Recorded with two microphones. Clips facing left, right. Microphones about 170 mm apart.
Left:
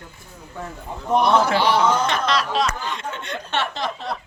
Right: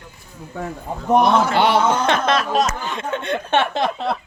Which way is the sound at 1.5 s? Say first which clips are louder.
Right 2 dB; 60° right (ahead or behind).